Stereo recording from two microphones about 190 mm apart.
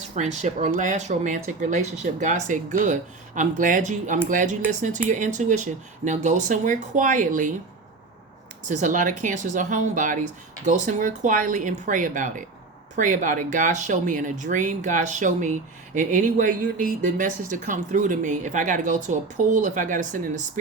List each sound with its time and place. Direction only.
0.1 s speech: 40° right (ahead or behind)
8.6 s speech: 40° right (ahead or behind)